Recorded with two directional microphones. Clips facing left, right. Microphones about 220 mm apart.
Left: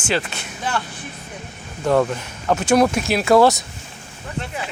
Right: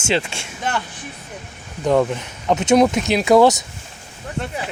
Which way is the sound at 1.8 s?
15° right (ahead or behind).